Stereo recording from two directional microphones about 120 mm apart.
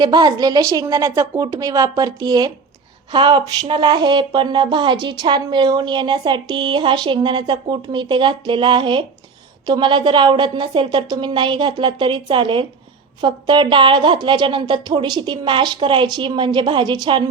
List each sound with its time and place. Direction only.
0.0 s speech: 35° right (ahead or behind)